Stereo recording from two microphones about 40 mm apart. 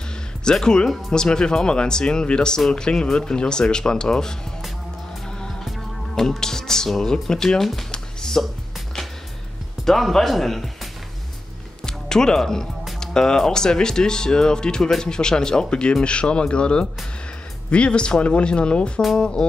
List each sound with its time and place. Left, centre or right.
0.6 s speech: centre
5.7 s speech: centre
7.9 s music: centre
9.8 s speech: centre
11.8 s music: centre
13.0 s speech: centre
14.8 s speech: centre
15.0 s speech: centre